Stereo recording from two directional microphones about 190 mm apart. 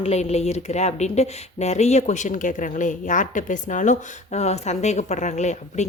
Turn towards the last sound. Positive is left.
turn(degrees=35)  # may be behind; listen again after turning